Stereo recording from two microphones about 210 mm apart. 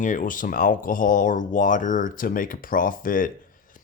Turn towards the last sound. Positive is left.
turn(degrees=40)  # may be behind; listen again after turning